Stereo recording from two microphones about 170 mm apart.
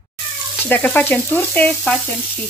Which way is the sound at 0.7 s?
10° left (ahead or behind).